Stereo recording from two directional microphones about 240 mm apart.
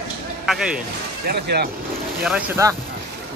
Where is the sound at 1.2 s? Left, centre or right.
Right.